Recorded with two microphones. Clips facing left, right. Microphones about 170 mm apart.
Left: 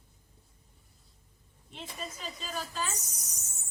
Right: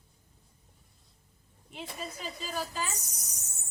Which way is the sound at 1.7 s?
5° right (ahead or behind).